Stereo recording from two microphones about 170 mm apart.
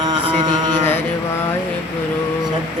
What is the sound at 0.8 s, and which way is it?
Mantra, 15° left (ahead or behind).